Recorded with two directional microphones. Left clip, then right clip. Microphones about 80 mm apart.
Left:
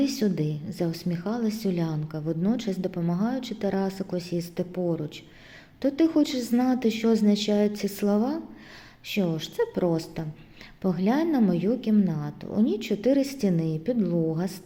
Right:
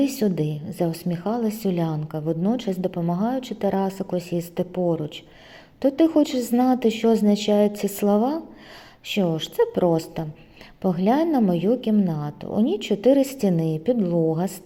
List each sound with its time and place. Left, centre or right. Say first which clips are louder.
0.0 s a woman's voice: right 4 dB; right